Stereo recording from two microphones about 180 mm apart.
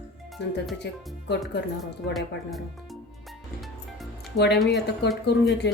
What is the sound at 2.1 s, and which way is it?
Music, centre (ahead or behind).